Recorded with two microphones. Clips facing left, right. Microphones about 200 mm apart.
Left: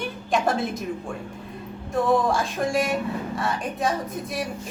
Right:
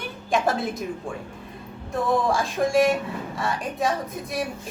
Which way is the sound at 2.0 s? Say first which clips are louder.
Left 1 dB; centre (ahead or behind).